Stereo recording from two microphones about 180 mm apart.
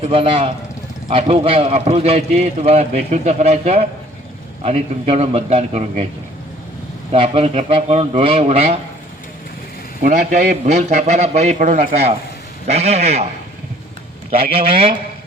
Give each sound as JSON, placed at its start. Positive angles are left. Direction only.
{"t": 0.1, "sound": "a man's voice", "side_deg": -30}
{"t": 7.1, "sound": "a man's voice", "side_deg": -30}
{"t": 10.0, "sound": "a man's voice", "side_deg": -45}